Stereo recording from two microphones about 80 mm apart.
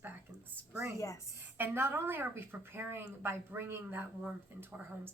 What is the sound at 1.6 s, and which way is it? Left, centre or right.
A woman's voice, right.